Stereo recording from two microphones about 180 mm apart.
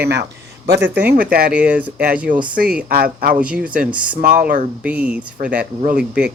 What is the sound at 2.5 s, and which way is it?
Speech, 55° right (ahead or behind).